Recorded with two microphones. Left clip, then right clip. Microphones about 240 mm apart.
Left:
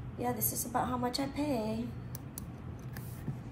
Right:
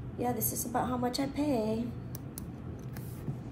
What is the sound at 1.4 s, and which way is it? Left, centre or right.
Speech, centre.